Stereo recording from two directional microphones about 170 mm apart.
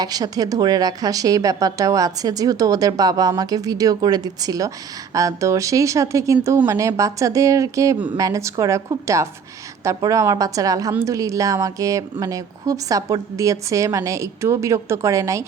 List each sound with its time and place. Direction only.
0.0 s a woman's voice: 20° right (ahead or behind)